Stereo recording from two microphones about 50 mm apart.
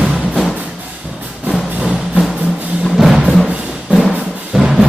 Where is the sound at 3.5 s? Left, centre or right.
Centre.